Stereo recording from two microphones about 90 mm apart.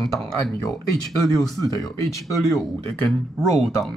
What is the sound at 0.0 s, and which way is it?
Speech, centre (ahead or behind).